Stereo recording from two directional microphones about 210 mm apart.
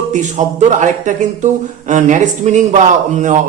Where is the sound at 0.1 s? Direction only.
35° right (ahead or behind).